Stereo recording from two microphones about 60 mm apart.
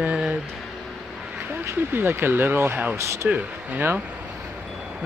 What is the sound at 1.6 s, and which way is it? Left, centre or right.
Speech, right.